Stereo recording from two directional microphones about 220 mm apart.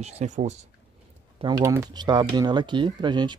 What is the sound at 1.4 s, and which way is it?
Speech, 15° right (ahead or behind).